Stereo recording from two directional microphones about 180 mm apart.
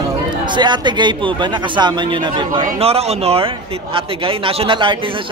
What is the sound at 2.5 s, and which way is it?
A man's voice, 35° right (ahead or behind).